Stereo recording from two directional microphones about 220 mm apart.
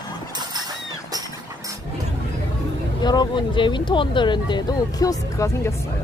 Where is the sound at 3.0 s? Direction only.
20° left (ahead or behind).